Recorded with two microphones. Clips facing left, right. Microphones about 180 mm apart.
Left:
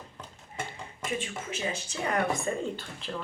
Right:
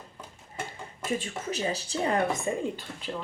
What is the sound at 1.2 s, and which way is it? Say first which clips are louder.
Speech: right 3 dB; 40° right (ahead or behind).